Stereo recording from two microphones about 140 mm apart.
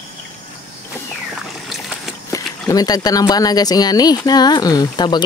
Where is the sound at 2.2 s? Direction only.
25° left (ahead or behind).